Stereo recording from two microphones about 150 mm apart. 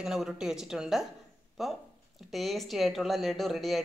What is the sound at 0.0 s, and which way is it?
Speech, 5° right (ahead or behind).